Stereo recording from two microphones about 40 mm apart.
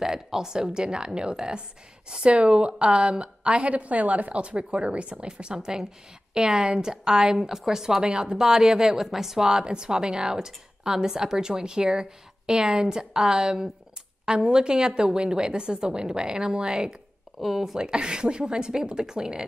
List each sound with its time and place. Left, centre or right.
0.0 s a woman's voice: centre
17.4 s speech: centre
17.7 s a woman's voice: right